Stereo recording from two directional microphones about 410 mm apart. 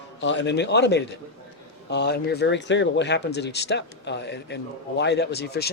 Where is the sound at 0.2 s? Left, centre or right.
Left.